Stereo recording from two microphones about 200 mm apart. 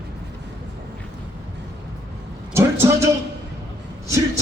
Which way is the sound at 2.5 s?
10° right (ahead or behind).